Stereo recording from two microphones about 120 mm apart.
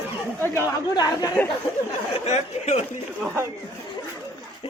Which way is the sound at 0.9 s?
35° left (ahead or behind).